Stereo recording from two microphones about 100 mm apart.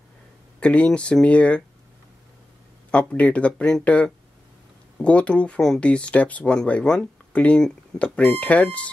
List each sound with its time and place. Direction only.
0.6 s speech: 10° left (ahead or behind)
2.9 s speech: 10° left (ahead or behind)